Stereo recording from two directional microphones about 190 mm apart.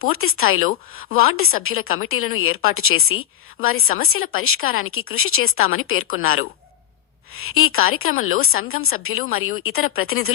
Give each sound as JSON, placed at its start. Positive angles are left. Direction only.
{"t": 0.0, "sound": "a woman's voice", "side_deg": 90}